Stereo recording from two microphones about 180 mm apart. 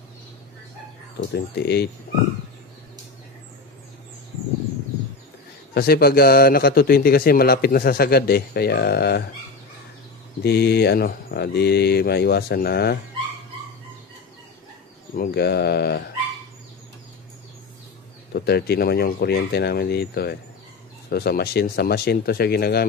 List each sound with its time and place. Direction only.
1.3 s a man's voice: 65° left (ahead or behind)
5.8 s a man's voice: 60° left (ahead or behind)
10.4 s a man's voice: 65° left (ahead or behind)
15.1 s a man's voice: 65° left (ahead or behind)
18.3 s a man's voice: 60° left (ahead or behind)